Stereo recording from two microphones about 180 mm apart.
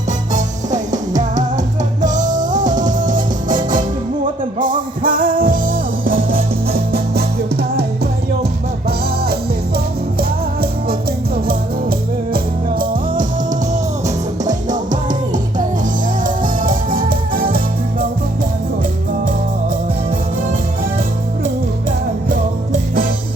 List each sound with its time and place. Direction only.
1.1 s music: 45° right (ahead or behind); by 7.3 s 60° right (ahead or behind)
8.9 s music: 60° right (ahead or behind)
16.2 s music: 50° right (ahead or behind)